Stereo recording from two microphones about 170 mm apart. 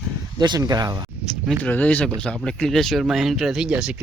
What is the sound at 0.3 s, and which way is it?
Speech, 25° right (ahead or behind).